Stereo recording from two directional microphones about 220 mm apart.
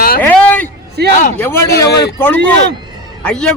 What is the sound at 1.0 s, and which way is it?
Speech, 45° right (ahead or behind).